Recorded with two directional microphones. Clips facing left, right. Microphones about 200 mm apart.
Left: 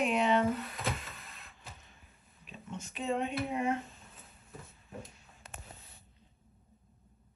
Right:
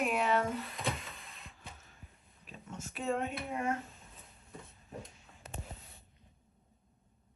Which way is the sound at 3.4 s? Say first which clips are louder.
Left 3 dB; 15° left (ahead or behind).